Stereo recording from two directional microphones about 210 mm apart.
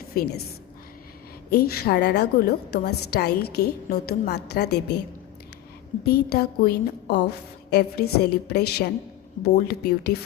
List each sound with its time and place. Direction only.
0.1 s a woman's voice: 45° left (ahead or behind)
1.5 s a woman's voice: 45° left (ahead or behind)
6.1 s a woman's voice: 50° left (ahead or behind)